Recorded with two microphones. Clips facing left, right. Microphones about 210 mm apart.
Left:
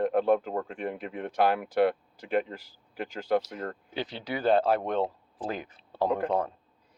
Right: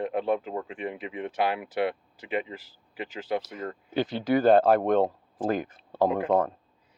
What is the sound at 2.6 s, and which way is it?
Speech, 45° left (ahead or behind).